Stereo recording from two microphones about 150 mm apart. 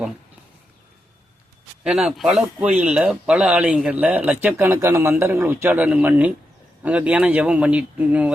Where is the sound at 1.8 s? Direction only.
5° right (ahead or behind).